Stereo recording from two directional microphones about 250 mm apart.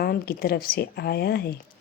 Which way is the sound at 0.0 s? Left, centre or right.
Left.